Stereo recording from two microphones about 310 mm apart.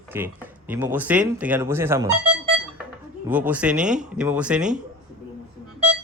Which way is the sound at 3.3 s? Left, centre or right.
Centre.